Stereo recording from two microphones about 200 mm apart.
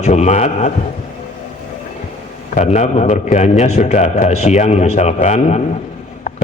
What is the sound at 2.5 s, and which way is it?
Speech, 35° left (ahead or behind).